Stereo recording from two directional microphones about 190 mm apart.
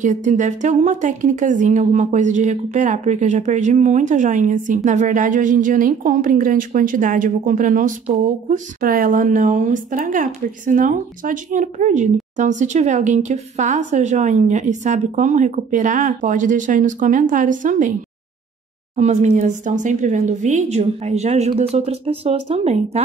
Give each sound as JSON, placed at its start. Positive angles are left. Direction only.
{"t": 0.0, "sound": "a woman's voice", "side_deg": -40}
{"t": 18.9, "sound": "a woman's voice", "side_deg": -35}